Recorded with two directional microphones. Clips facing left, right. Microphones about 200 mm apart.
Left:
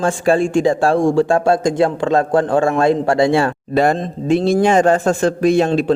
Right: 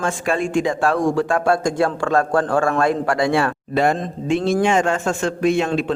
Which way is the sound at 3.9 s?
25° left (ahead or behind).